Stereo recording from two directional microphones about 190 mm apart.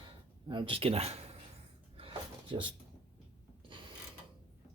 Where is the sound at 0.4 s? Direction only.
25° right (ahead or behind).